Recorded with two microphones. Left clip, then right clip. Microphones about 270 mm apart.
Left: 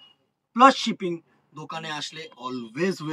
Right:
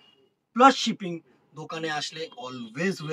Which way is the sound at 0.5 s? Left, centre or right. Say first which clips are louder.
Left 2 dB; centre.